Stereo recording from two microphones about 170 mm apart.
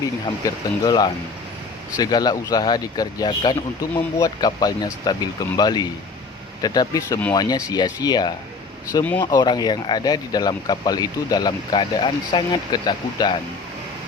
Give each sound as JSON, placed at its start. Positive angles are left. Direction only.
{"t": 0.4, "sound": "speech", "side_deg": 20}